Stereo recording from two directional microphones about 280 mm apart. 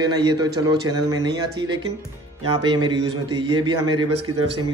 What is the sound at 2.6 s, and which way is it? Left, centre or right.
A man's voice, centre.